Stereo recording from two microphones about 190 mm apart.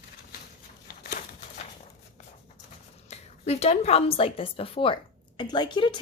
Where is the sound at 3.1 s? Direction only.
35° left (ahead or behind).